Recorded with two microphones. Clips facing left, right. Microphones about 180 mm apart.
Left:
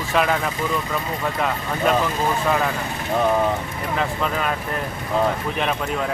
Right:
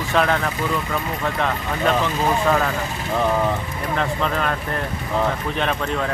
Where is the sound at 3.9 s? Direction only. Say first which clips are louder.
Right 1 dB; 5° left (ahead or behind).